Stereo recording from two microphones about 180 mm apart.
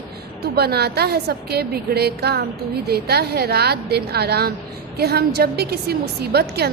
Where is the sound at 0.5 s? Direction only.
60° right (ahead or behind).